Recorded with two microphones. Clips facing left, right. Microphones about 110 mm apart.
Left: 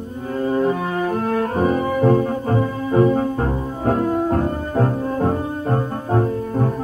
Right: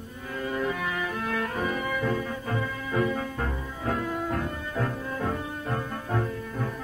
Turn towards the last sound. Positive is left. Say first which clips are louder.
# left 11 dB
turn(degrees=40)  # may be behind; listen again after turning